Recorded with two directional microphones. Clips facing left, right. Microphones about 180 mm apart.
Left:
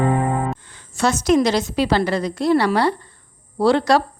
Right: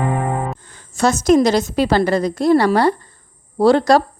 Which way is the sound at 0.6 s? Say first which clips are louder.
Right 7 dB; 45° right (ahead or behind).